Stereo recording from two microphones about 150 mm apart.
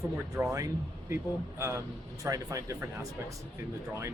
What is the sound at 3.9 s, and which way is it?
Speech, 20° right (ahead or behind).